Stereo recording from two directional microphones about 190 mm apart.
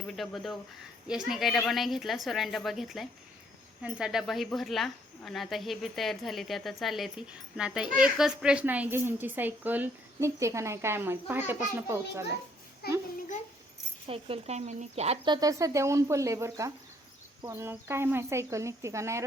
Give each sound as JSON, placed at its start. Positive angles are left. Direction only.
{"t": 0.2, "sound": "a woman's voice", "side_deg": 0}
{"t": 12.8, "sound": "a child's voice", "side_deg": 55}
{"t": 14.1, "sound": "a woman's voice", "side_deg": -30}